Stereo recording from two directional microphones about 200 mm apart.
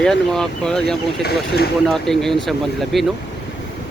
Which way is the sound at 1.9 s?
Centre (ahead or behind).